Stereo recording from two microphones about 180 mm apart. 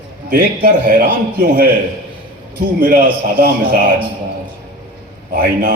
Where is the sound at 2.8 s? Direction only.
50° right (ahead or behind).